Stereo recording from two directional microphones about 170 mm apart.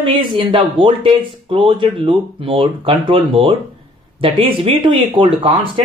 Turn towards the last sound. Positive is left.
turn(degrees=-30)  # may be behind; listen again after turning